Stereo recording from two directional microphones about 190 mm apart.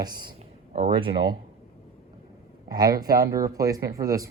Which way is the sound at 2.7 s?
20° right (ahead or behind).